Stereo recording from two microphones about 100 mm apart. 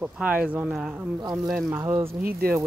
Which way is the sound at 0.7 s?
5° right (ahead or behind).